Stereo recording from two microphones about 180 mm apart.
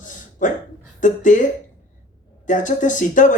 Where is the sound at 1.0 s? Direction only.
45° left (ahead or behind).